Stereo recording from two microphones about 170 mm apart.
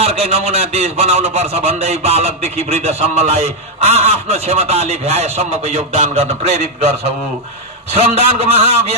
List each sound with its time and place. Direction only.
0.0 s a man's voice: 35° right (ahead or behind)